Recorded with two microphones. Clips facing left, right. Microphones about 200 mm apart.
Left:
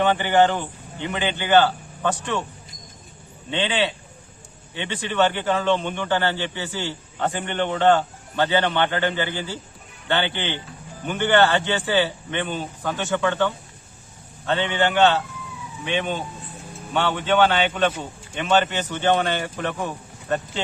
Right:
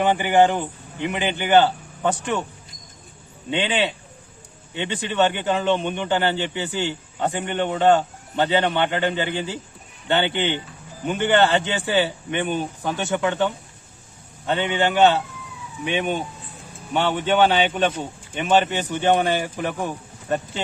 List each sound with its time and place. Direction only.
0.0 s a man's voice: 10° right (ahead or behind)
3.5 s a man's voice: 20° right (ahead or behind)